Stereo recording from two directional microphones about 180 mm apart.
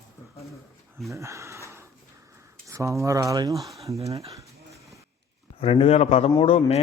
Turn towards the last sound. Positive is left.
turn(degrees=30)  # may be behind; listen again after turning